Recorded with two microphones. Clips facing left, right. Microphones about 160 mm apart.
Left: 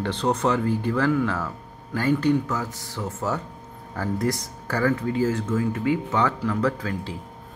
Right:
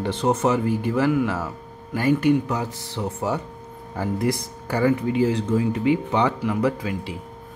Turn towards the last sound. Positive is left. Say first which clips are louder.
# right 2 dB
turn(degrees=-15)  # may be behind; listen again after turning